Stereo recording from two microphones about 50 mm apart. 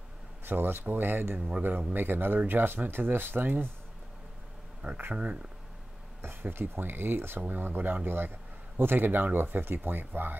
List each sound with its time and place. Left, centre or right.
0.5 s speech: right
4.8 s speech: right
6.4 s speech: right